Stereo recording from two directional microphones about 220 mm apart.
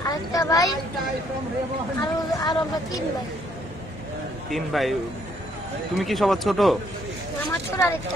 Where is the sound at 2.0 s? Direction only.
20° left (ahead or behind).